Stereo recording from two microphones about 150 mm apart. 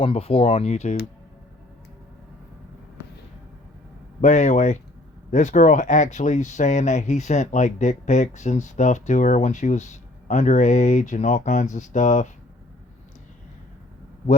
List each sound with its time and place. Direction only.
0.0 s speech: 40° left (ahead or behind)
4.2 s speech: 50° left (ahead or behind)